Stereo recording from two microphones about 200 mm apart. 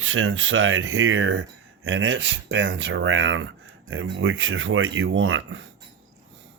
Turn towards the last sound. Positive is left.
turn(degrees=-75)  # may be behind; listen again after turning